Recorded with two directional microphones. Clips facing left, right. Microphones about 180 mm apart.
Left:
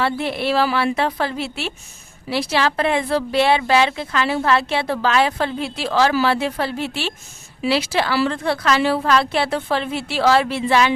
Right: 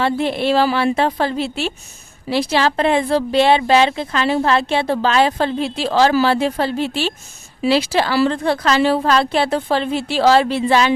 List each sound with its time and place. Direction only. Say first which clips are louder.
0.0 s a woman's voice: right 3 dB; 25° right (ahead or behind)